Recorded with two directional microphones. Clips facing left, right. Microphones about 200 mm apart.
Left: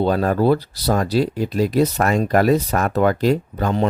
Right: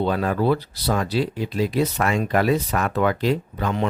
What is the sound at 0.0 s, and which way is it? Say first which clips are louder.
Speech: left 4 dB; 40° left (ahead or behind).